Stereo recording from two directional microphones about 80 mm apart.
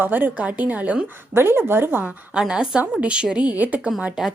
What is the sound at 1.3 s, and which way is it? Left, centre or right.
Speech, right.